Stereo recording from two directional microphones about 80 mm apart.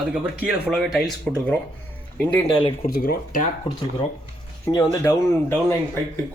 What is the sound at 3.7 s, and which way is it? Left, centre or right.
Speech, left.